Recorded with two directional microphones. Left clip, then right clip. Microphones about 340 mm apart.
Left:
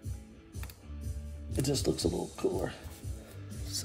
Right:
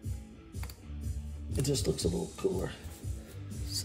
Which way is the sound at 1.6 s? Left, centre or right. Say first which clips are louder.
Left 1 dB; centre.